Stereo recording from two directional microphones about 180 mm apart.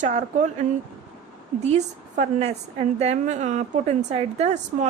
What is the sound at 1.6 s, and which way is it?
A woman's voice, 40° right (ahead or behind).